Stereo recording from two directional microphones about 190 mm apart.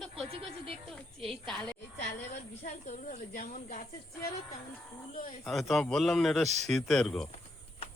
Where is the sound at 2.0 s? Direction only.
40° left (ahead or behind).